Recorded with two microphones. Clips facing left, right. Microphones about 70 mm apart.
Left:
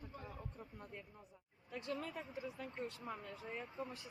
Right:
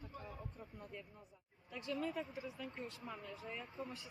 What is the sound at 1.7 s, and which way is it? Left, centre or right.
Speech, left.